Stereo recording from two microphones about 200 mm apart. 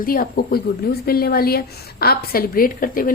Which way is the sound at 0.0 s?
45° left (ahead or behind).